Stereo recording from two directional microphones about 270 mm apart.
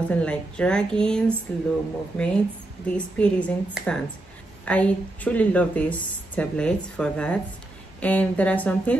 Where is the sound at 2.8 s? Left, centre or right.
Centre.